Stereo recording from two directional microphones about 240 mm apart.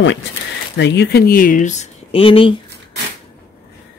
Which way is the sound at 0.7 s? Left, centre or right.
Left.